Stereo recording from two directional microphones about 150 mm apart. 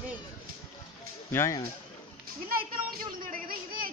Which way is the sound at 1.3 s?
20° left (ahead or behind).